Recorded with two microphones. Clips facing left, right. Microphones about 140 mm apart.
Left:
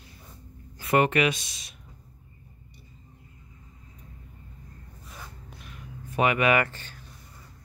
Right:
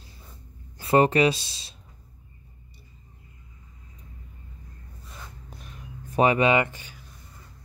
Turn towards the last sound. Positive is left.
turn(degrees=-10)  # may be behind; listen again after turning